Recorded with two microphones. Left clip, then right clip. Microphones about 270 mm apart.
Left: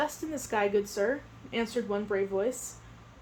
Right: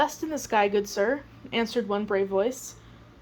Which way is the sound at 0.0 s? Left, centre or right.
Centre.